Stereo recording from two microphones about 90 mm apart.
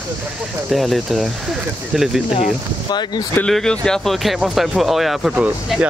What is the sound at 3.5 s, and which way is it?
Speech, 5° left (ahead or behind).